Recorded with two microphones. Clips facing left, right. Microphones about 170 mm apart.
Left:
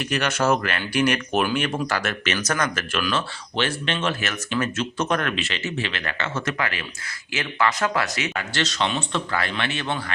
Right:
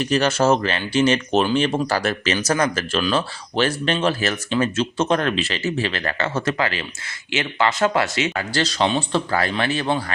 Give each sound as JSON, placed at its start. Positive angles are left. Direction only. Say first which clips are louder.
{"t": 0.0, "sound": "speech", "louder": "right 5 dB", "side_deg": -30}